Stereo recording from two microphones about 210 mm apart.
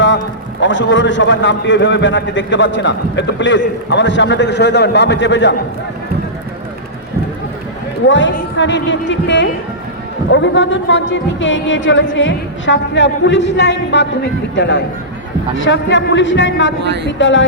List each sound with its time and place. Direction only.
0.6 s a man's voice: 60° left (ahead or behind)
8.0 s a man's voice: 60° left (ahead or behind)
16.8 s speech: 55° right (ahead or behind)
17.1 s a man's voice: 60° left (ahead or behind)